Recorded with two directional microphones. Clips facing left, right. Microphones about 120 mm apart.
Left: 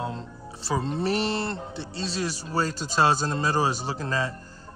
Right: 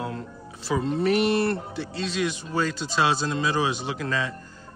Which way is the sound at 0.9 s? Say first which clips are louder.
Right 7 dB; 30° left (ahead or behind).